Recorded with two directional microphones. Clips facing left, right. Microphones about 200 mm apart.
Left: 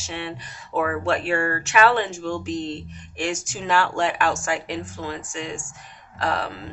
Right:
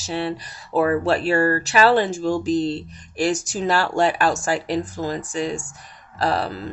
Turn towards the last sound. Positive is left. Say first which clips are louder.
# right 4 dB
turn(degrees=-35)  # may be behind; listen again after turning